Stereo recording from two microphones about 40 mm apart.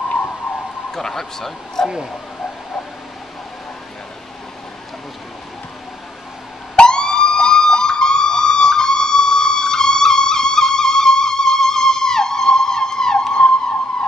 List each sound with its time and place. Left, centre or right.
0.3 s emergency vehicle: centre
0.6 s a sound: centre
0.8 s speech: centre
1.9 s speech: centre
6.7 s emergency vehicle: left